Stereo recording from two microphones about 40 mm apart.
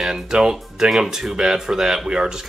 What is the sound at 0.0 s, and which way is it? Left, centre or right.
Speech, centre.